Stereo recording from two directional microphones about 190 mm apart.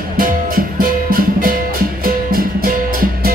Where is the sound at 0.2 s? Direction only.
50° right (ahead or behind).